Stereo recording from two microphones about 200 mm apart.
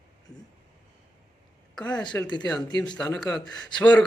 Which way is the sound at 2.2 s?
20° left (ahead or behind).